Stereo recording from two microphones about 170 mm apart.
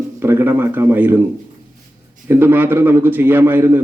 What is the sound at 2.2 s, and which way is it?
Speech, 10° right (ahead or behind).